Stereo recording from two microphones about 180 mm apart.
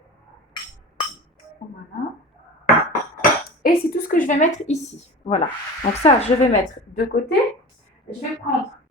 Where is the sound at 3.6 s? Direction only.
50° left (ahead or behind).